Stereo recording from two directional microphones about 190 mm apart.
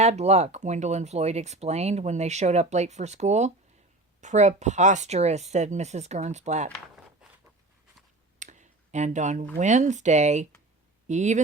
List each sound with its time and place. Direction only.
0.0 s speech: 35° right (ahead or behind)
8.4 s a sound: 40° right (ahead or behind)
9.6 s speech: 40° right (ahead or behind)